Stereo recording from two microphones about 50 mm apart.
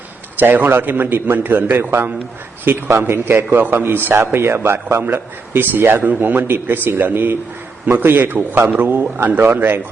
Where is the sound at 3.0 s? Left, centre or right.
Right.